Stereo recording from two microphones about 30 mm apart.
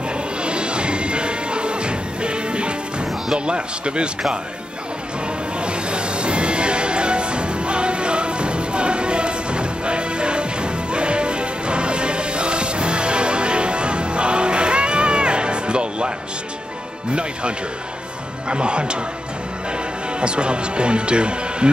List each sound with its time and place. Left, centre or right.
0.4 s music: right
3.3 s speech: right
5.6 s music: right
17.1 s speech: right
20.2 s speech: right